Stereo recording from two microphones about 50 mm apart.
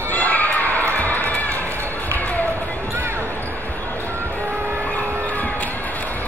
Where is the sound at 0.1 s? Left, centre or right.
Left.